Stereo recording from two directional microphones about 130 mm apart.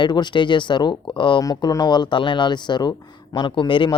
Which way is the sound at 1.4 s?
25° left (ahead or behind).